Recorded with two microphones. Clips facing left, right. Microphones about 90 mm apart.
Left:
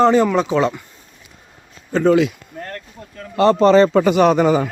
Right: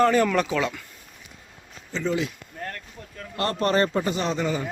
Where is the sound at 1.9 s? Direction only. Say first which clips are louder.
Left 12 dB; 65° left (ahead or behind); by 2.3 s 80° left.